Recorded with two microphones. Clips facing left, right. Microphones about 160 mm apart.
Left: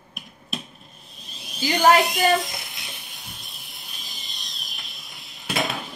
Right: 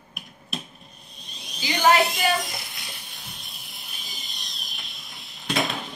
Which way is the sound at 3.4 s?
Centre (ahead or behind).